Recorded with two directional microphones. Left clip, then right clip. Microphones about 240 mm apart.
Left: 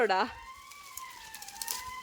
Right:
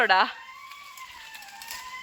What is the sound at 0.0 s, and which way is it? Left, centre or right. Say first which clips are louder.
Speech: right 7 dB; centre.